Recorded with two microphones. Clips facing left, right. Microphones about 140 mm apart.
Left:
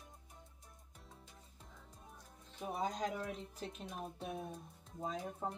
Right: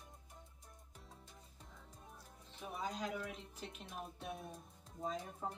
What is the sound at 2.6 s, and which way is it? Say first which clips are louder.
Speech: left 4 dB; 35° left (ahead or behind).